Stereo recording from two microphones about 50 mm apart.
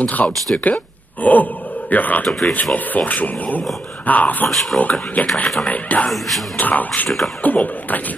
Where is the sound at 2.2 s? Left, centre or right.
Centre.